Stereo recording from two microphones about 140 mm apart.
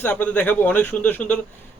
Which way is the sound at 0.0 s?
10° left (ahead or behind).